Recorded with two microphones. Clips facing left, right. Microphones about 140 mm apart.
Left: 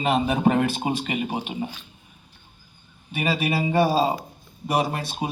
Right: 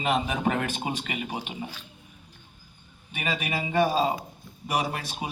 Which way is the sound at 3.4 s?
35° left (ahead or behind).